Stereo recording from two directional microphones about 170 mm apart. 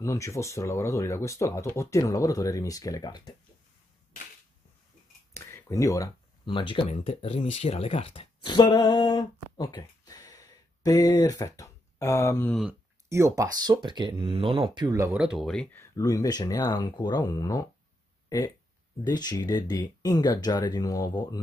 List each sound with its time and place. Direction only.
0.0 s speech: 15° left (ahead or behind)
5.3 s speech: 15° left (ahead or behind)
13.1 s speech: 20° right (ahead or behind)
15.1 s speech: 5° right (ahead or behind)
15.8 s speech: 20° left (ahead or behind)
19.0 s speech: 25° left (ahead or behind)